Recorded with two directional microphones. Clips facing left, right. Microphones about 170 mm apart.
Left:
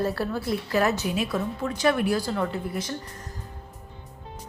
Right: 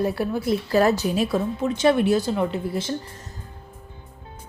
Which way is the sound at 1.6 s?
20° right (ahead or behind).